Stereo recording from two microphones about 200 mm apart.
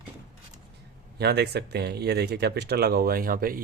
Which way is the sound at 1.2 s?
55° right (ahead or behind).